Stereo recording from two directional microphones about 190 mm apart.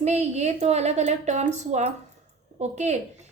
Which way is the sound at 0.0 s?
35° right (ahead or behind).